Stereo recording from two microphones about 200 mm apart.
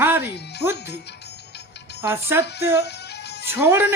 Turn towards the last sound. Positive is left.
turn(degrees=-10)  # may be behind; listen again after turning